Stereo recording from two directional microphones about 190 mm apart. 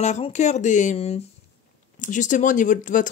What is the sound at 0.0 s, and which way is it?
Speech, 35° left (ahead or behind).